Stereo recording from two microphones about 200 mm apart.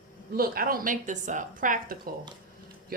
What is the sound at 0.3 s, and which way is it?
A woman's voice, 50° right (ahead or behind).